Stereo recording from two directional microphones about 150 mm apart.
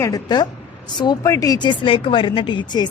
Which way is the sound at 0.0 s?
25° left (ahead or behind).